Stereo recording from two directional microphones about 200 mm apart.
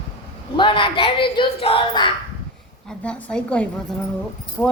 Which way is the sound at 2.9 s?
5° left (ahead or behind).